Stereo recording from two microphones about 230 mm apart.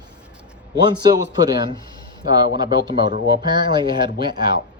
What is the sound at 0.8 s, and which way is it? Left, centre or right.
Speech, centre.